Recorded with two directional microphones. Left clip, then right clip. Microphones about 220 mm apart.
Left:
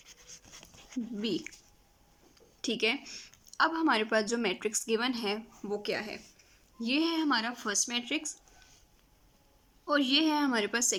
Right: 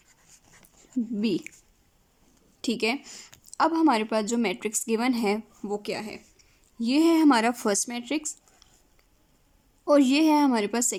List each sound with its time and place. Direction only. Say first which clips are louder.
0.5 s dog: left 2 dB; 5° left (ahead or behind)
1.2 s a woman's voice: right 4 dB; 20° right (ahead or behind)
2.6 s a woman's voice: right 3 dB; 20° right (ahead or behind)
9.8 s a woman's voice: right 7 dB; 30° right (ahead or behind)